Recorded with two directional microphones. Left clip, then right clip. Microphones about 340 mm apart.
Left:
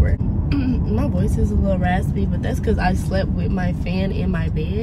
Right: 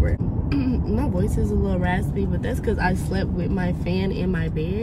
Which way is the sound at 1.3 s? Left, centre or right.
Centre.